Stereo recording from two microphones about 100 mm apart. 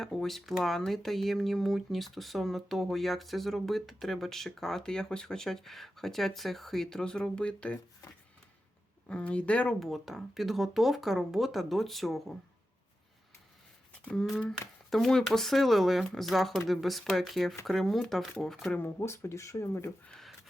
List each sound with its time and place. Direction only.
0.0 s speech: centre (ahead or behind)
9.0 s speech: 10° left (ahead or behind)
9.8 s speech: centre (ahead or behind)
14.0 s speech: 10° left (ahead or behind)
18.8 s speech: 25° left (ahead or behind)
20.1 s speech: 5° left (ahead or behind)